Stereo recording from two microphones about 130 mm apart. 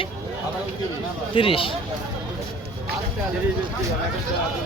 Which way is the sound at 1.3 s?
45° left (ahead or behind).